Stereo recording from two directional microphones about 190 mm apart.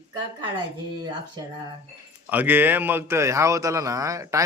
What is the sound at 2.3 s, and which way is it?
A man's voice, 10° right (ahead or behind).